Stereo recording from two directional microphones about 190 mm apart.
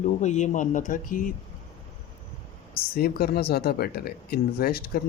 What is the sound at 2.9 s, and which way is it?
Speech, 55° left (ahead or behind).